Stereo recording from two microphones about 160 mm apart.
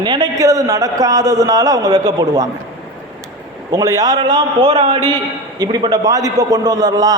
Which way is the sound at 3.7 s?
20° right (ahead or behind).